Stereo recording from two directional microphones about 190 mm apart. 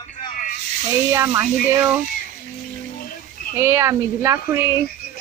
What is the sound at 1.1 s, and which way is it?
Speech, 15° right (ahead or behind).